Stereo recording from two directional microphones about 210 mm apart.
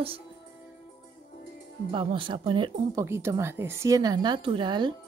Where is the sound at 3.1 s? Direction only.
10° right (ahead or behind).